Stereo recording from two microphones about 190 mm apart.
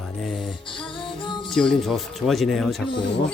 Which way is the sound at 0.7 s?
25° left (ahead or behind).